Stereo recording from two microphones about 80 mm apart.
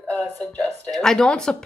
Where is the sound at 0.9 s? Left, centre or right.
Centre.